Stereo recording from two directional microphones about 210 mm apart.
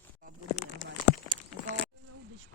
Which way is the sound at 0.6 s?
30° left (ahead or behind).